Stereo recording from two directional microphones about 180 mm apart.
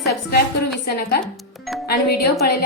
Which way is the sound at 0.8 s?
60° left (ahead or behind).